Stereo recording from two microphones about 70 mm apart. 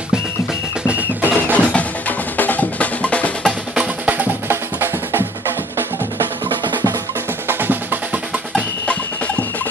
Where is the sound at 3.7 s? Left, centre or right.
Centre.